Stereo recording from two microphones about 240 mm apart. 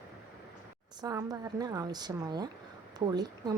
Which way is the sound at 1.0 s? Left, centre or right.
Centre.